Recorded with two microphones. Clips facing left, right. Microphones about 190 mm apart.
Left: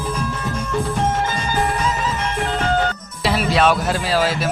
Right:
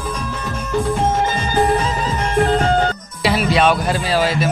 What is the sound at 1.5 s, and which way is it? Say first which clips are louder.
Music: right 5 dB; 35° right (ahead or behind).